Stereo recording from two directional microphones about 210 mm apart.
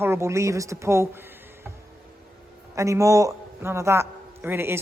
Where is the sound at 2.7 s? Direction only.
15° right (ahead or behind).